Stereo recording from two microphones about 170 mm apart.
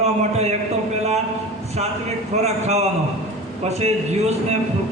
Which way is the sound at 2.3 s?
40° right (ahead or behind).